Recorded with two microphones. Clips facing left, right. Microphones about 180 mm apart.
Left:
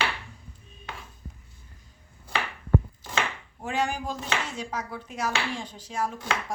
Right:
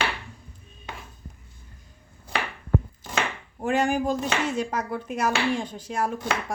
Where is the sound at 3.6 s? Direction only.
50° right (ahead or behind).